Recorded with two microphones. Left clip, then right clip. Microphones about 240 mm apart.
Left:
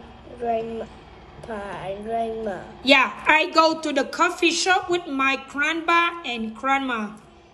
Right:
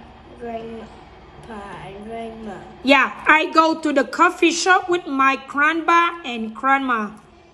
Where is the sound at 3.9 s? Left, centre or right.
Right.